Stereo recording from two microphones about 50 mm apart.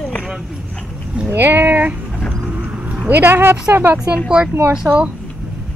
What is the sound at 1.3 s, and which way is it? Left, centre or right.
Speech, right.